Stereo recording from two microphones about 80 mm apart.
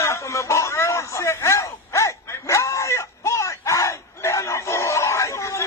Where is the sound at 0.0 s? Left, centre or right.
Left.